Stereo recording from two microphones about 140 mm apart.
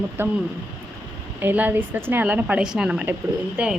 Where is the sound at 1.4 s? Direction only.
15° right (ahead or behind).